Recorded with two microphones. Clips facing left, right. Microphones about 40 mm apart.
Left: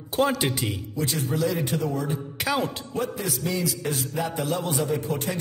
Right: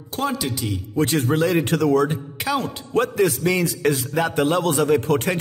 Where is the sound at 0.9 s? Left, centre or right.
Right.